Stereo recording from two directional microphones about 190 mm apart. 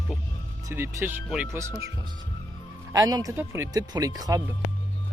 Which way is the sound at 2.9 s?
20° right (ahead or behind).